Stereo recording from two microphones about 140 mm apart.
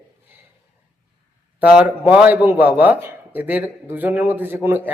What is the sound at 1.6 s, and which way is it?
Speech, 10° right (ahead or behind).